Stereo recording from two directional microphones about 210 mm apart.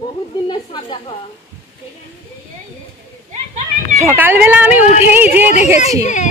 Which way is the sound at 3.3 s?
35° right (ahead or behind).